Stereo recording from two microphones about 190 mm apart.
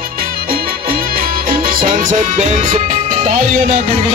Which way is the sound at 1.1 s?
50° right (ahead or behind).